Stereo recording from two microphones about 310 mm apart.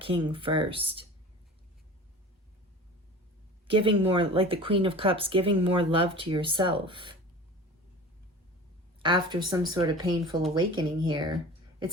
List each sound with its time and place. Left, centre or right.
0.0 s speech: centre
3.7 s speech: centre
9.0 s speech: centre